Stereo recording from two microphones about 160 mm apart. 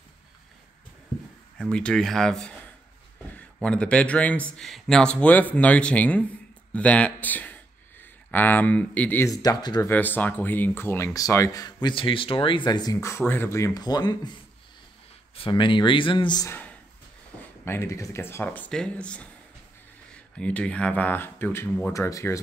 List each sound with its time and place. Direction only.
1.6 s speech: 5° left (ahead or behind)
3.6 s speech: 5° left (ahead or behind); by 9.8 s 25° left (ahead or behind)
9.8 s speech: 10° left (ahead or behind)
15.3 s speech: 30° left (ahead or behind)
16.4 s speech: 10° left (ahead or behind)
20.3 s speech: 10° left (ahead or behind)